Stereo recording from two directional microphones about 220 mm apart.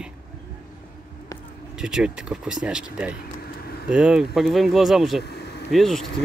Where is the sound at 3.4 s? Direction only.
45° left (ahead or behind).